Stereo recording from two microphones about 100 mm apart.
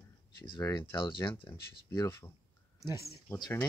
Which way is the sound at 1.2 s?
20° left (ahead or behind).